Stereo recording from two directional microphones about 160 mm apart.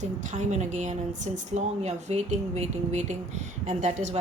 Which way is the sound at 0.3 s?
50° right (ahead or behind).